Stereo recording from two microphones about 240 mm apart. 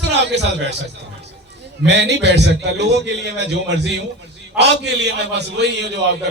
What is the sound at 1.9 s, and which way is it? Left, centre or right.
A man's voice, right.